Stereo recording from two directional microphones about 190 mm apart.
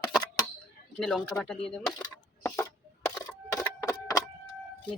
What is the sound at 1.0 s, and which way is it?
Speech, centre (ahead or behind).